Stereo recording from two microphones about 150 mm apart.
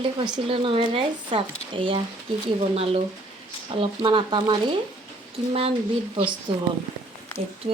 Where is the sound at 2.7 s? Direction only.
40° right (ahead or behind).